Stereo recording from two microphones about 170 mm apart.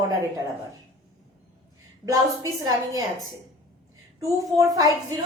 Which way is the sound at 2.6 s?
20° right (ahead or behind).